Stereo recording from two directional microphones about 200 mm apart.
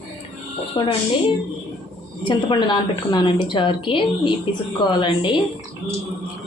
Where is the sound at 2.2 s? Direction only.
25° left (ahead or behind).